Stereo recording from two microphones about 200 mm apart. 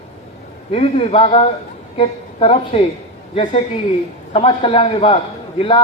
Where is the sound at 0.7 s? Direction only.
30° left (ahead or behind).